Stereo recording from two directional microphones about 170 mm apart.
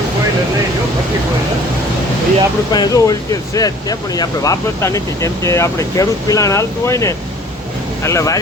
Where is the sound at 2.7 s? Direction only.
20° left (ahead or behind).